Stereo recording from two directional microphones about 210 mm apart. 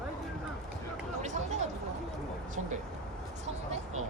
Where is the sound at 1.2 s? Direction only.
35° right (ahead or behind).